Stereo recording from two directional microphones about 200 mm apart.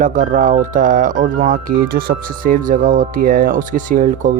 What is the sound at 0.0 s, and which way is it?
Speech, 40° right (ahead or behind).